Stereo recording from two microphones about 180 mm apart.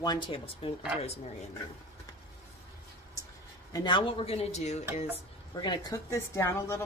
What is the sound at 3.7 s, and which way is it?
Speech, 25° left (ahead or behind).